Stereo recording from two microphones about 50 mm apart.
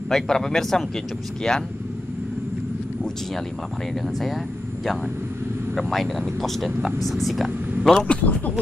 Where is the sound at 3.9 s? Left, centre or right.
Centre.